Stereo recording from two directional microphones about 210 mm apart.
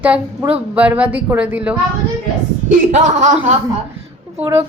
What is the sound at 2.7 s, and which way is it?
Speech, 35° right (ahead or behind).